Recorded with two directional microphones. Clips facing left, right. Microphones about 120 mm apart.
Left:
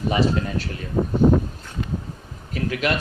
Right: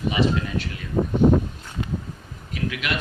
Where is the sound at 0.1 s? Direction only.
40° left (ahead or behind).